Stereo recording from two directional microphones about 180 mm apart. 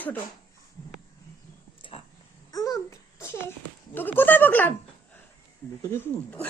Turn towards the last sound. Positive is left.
turn(degrees=10)  # may be behind; listen again after turning